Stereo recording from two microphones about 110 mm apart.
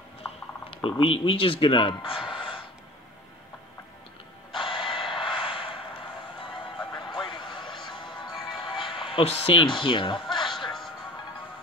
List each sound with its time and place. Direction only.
0.8 s speech: 55° left (ahead or behind)
4.5 s a sound: 50° left (ahead or behind)
5.2 s vehicle: 55° left (ahead or behind)
6.9 s vehicle: 50° left (ahead or behind)
7.9 s music: 45° left (ahead or behind)
9.8 s music: 45° left (ahead or behind)